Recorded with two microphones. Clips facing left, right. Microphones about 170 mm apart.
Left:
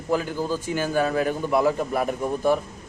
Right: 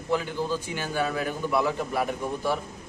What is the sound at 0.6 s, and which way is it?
A man's voice, 45° left (ahead or behind).